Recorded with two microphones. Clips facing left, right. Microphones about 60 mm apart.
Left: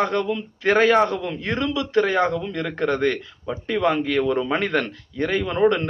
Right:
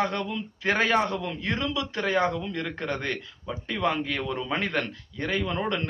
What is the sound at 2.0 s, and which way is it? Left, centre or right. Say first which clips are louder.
Speech: left 4 dB; left.